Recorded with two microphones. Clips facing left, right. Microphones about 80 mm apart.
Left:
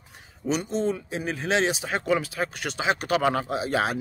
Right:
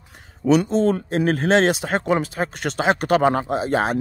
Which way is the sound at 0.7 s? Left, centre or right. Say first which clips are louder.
Right 7 dB; right.